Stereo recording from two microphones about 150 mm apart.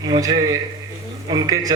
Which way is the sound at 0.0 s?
25° right (ahead or behind).